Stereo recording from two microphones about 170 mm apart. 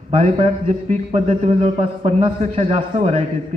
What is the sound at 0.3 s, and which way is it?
A man's voice, 40° right (ahead or behind).